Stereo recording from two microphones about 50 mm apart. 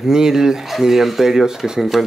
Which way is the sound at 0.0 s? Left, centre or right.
Centre.